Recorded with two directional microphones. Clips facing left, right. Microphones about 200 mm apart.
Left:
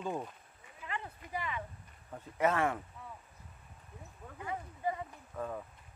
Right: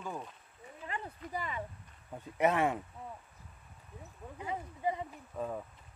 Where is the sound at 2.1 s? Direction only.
15° right (ahead or behind).